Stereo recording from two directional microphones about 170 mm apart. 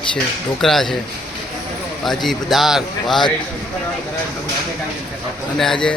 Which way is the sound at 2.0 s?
Centre (ahead or behind).